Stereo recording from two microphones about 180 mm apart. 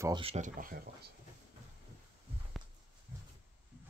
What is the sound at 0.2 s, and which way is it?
Speech, 35° right (ahead or behind).